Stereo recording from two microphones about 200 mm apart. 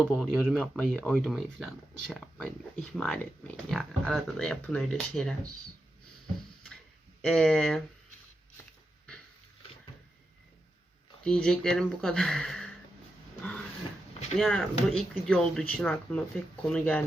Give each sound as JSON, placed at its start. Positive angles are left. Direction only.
{"t": 0.0, "sound": "speech", "side_deg": -5}
{"t": 7.2, "sound": "speech", "side_deg": 5}
{"t": 11.2, "sound": "speech", "side_deg": 5}
{"t": 14.1, "sound": "a sound", "side_deg": 30}
{"t": 14.3, "sound": "speech", "side_deg": 5}